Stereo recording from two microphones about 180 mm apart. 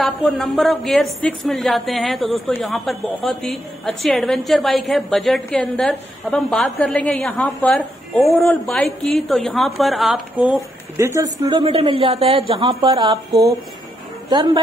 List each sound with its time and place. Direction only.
0.0 s a woman's voice: centre (ahead or behind); by 13.2 s 30° right (ahead or behind)
14.3 s a woman's voice: 25° right (ahead or behind)